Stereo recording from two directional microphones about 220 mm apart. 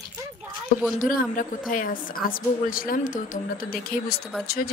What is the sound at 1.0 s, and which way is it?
A woman's voice, 40° left (ahead or behind).